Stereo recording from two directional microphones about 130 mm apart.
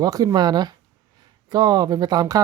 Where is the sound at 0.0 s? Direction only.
30° right (ahead or behind).